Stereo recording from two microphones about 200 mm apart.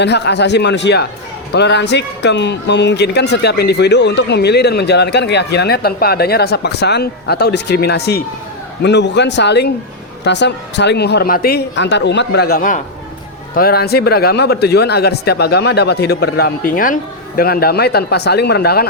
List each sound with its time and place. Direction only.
0.0 s speech: 60° left (ahead or behind)